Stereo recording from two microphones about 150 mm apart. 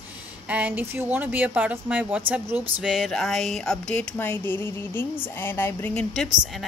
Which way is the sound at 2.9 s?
Centre (ahead or behind).